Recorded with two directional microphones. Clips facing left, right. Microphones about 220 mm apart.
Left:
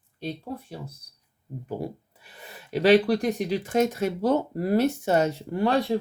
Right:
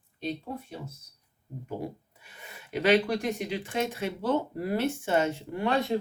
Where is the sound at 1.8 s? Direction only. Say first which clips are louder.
Left 3 dB; 35° left (ahead or behind).